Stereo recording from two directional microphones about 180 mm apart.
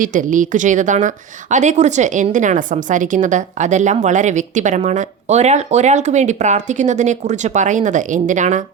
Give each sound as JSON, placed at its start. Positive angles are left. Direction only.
{"t": 0.0, "sound": "a woman's voice", "side_deg": -45}